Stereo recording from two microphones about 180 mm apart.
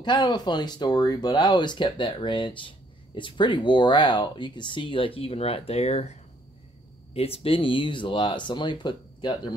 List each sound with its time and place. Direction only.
0.0 s speech: 25° left (ahead or behind)
7.2 s speech: 35° left (ahead or behind)